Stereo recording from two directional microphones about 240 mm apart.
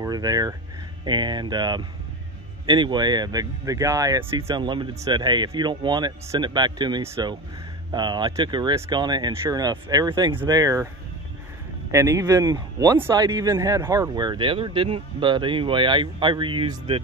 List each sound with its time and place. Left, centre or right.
0.0 s speech: centre
11.9 s speech: centre